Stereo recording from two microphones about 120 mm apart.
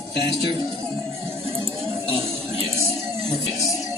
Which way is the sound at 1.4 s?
50° right (ahead or behind).